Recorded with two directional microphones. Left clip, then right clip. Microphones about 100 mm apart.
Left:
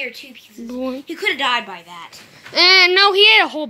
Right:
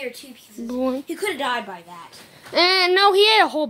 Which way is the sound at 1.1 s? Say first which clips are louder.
Left 5 dB; 65° right (ahead or behind).